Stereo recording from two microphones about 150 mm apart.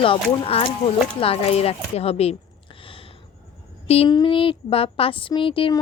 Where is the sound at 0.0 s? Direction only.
40° left (ahead or behind).